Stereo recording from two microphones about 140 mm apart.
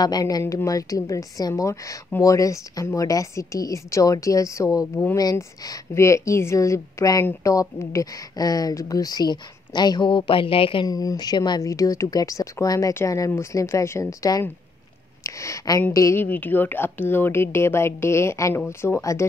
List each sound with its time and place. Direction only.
0.0 s a woman's voice: 30° left (ahead or behind)
10.9 s a woman's voice: 25° left (ahead or behind)